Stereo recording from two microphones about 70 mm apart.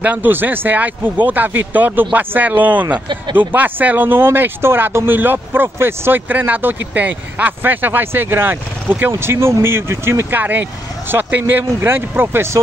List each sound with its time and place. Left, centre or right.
0.0 s speech: right
10.3 s speech: right